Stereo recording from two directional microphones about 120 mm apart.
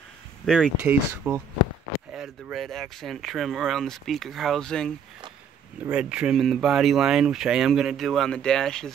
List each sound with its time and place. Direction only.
0.5 s speech: 5° left (ahead or behind)
1.3 s speech: 15° right (ahead or behind)
2.1 s speech: centre (ahead or behind)
5.9 s speech: 10° right (ahead or behind)